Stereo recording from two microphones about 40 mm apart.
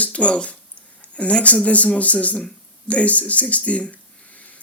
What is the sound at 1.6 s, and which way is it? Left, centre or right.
Speech, left.